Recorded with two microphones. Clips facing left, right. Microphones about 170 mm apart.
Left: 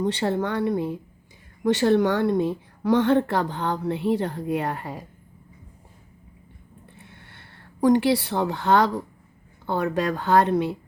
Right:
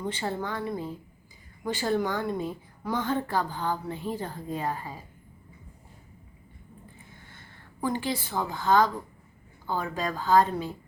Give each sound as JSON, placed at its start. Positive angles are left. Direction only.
{"t": 0.0, "sound": "a woman's voice", "side_deg": 75}
{"t": 7.0, "sound": "a sound", "side_deg": 70}
{"t": 9.6, "sound": "a woman's voice", "side_deg": 70}